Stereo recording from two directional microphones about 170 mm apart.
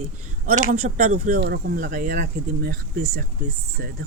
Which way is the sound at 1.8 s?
50° right (ahead or behind).